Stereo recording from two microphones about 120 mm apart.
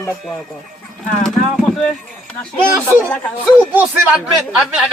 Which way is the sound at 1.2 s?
5° left (ahead or behind).